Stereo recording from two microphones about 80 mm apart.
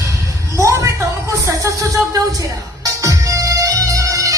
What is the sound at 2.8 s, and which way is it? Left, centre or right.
Music, right.